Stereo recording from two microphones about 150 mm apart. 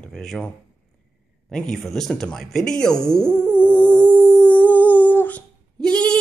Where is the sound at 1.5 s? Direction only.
5° left (ahead or behind).